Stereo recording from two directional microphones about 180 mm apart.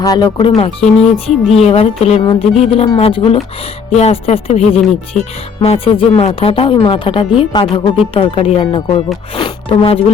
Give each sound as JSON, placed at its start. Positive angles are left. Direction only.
{"t": 0.0, "sound": "speech", "side_deg": 25}
{"t": 1.1, "sound": "music", "side_deg": 0}
{"t": 1.5, "sound": "speech", "side_deg": 35}